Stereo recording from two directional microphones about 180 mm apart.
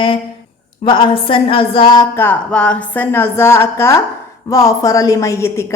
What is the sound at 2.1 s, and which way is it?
A woman's voice, 10° left (ahead or behind).